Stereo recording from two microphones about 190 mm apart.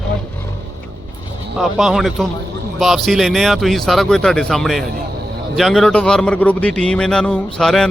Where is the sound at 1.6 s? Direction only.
Centre (ahead or behind).